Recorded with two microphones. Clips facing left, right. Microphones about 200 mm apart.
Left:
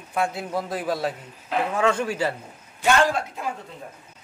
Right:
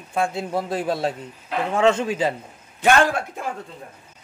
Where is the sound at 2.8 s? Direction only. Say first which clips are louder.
Right 2 dB; 55° right (ahead or behind).